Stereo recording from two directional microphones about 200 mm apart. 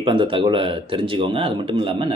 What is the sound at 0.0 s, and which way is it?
Speech, 25° right (ahead or behind).